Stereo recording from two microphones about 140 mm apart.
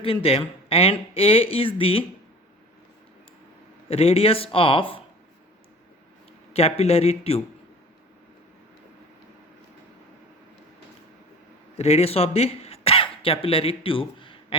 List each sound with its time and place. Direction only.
0.0 s speech: 40° left (ahead or behind)
3.8 s speech: 45° left (ahead or behind)
6.5 s speech: 45° left (ahead or behind)
11.8 s speech: 45° left (ahead or behind)